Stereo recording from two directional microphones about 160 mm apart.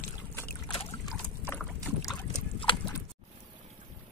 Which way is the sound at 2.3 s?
35° left (ahead or behind).